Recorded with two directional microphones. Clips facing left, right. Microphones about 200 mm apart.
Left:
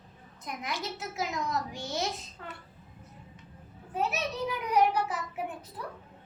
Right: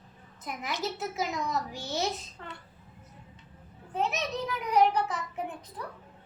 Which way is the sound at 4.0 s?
10° left (ahead or behind).